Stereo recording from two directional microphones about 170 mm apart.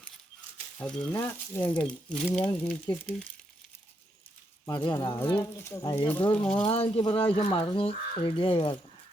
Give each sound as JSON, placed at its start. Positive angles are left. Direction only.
{"t": 1.1, "sound": "speech", "side_deg": 10}
{"t": 4.7, "sound": "speech", "side_deg": 25}
{"t": 6.7, "sound": "speech", "side_deg": 35}